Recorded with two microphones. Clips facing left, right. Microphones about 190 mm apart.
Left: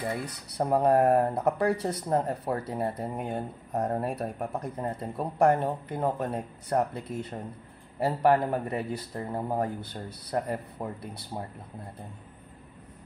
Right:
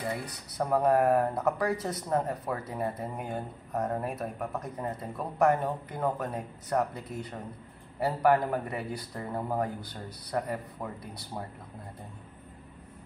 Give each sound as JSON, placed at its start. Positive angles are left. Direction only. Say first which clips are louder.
{"t": 0.6, "sound": "speech", "louder": "left 2 dB", "side_deg": 25}